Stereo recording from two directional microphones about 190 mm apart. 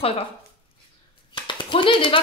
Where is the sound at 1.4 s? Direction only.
25° left (ahead or behind).